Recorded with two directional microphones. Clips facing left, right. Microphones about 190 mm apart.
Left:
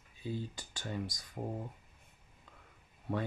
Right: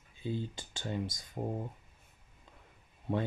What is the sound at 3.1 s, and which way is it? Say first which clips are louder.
Speech: right 3 dB; 20° right (ahead or behind).